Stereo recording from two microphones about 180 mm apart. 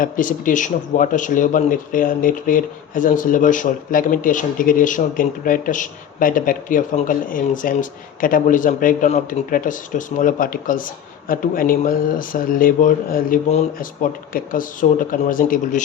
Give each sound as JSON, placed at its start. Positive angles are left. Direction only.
{"t": 0.0, "sound": "speech", "side_deg": 45}